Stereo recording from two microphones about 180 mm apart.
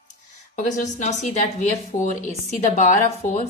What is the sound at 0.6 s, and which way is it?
Speech, 40° left (ahead or behind).